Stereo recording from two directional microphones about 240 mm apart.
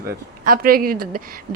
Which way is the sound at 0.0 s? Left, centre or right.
Right.